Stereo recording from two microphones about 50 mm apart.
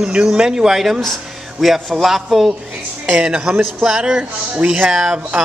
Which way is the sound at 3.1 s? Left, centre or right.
Centre.